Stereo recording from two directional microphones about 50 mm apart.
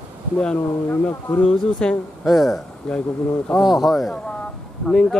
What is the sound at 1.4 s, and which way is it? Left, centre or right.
Speech, centre.